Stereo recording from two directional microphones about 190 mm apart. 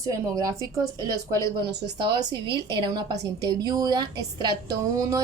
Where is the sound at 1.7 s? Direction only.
60° right (ahead or behind).